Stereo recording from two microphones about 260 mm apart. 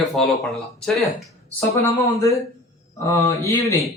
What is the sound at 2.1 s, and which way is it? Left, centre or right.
Speech, centre.